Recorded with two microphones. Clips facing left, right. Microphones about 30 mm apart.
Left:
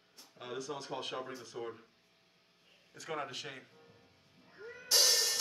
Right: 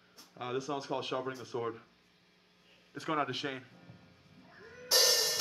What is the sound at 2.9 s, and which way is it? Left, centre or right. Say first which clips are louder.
Speech: right 7 dB; right.